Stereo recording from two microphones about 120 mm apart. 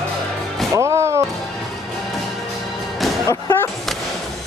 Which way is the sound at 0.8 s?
25° right (ahead or behind).